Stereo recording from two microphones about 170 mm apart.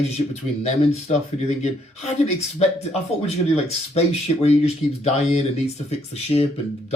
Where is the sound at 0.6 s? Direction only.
40° left (ahead or behind).